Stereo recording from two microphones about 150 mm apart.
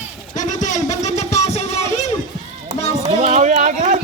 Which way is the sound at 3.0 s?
45° right (ahead or behind).